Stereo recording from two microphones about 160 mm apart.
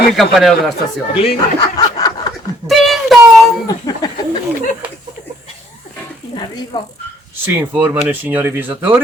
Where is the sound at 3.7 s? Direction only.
25° left (ahead or behind).